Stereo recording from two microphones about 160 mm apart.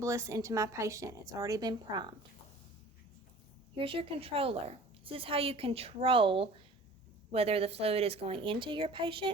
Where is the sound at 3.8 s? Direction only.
35° right (ahead or behind).